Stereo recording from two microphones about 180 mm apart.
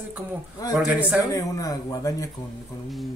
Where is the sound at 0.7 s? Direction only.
5° right (ahead or behind).